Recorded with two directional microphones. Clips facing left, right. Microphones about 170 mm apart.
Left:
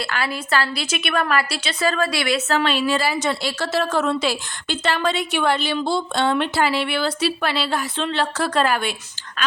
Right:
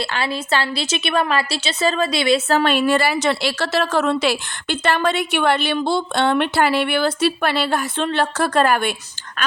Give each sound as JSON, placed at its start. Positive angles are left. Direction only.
{"t": 0.0, "sound": "a woman's voice", "side_deg": -25}
{"t": 2.5, "sound": "a woman's voice", "side_deg": -40}
{"t": 2.7, "sound": "a woman's voice", "side_deg": -60}